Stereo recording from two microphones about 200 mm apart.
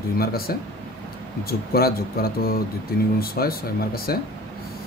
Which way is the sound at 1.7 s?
50° left (ahead or behind).